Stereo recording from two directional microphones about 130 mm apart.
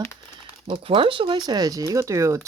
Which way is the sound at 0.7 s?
45° right (ahead or behind).